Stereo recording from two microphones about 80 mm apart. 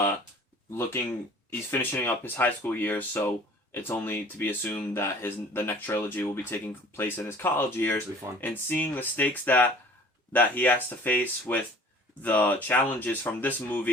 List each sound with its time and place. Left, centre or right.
1.5 s speech: left